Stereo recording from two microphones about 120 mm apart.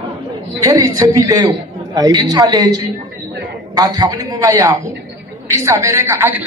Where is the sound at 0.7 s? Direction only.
30° right (ahead or behind).